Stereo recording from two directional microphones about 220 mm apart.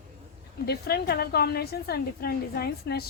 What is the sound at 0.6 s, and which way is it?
A woman's voice, 45° left (ahead or behind).